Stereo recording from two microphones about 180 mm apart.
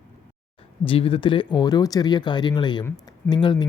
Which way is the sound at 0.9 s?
30° left (ahead or behind).